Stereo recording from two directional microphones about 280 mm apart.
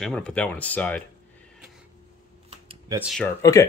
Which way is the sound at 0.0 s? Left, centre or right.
Centre.